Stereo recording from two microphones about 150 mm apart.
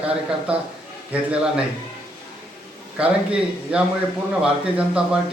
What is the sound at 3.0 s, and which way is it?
A man's voice, 5° right (ahead or behind).